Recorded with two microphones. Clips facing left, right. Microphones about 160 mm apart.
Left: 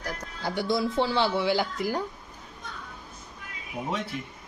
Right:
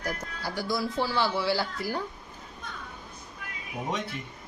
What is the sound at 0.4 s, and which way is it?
Speech, 25° left (ahead or behind).